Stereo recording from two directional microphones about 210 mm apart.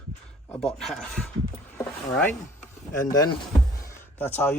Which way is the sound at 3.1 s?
15° left (ahead or behind).